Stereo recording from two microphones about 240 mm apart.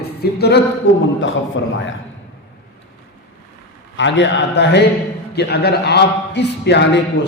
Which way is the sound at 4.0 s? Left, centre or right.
Left.